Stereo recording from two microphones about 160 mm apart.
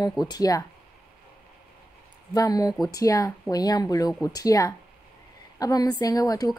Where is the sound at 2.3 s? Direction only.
25° left (ahead or behind).